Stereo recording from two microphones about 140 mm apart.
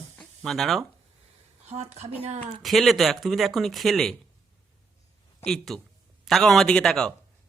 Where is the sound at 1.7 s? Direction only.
55° right (ahead or behind).